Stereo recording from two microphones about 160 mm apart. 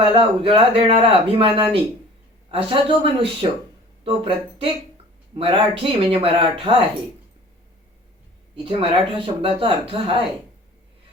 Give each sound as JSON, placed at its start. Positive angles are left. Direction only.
{"t": 0.0, "sound": "a man's voice", "side_deg": -35}
{"t": 8.5, "sound": "a man's voice", "side_deg": -35}